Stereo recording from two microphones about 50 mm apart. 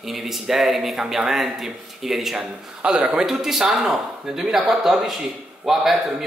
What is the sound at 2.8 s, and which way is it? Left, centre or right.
Speech, centre.